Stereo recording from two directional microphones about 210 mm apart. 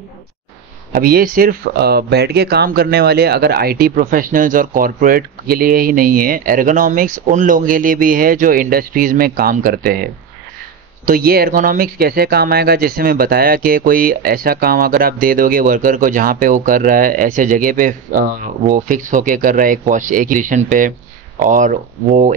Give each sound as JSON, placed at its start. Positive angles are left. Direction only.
{"t": 0.9, "sound": "speech", "side_deg": -45}
{"t": 11.1, "sound": "speech", "side_deg": -45}